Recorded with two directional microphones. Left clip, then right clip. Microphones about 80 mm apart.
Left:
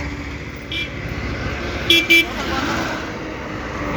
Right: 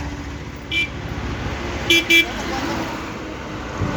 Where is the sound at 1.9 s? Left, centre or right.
Left.